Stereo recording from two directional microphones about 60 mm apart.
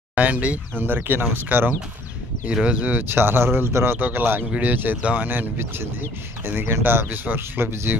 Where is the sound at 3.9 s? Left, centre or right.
Right.